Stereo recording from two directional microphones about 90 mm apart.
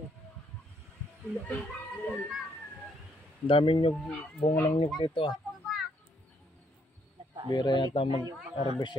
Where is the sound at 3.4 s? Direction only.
80° left.